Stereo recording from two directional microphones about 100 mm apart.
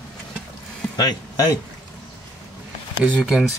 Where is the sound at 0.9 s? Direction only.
40° left (ahead or behind).